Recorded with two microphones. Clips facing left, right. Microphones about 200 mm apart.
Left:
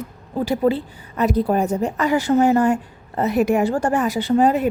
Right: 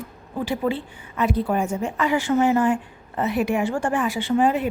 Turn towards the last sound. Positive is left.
turn(degrees=40)  # may be behind; listen again after turning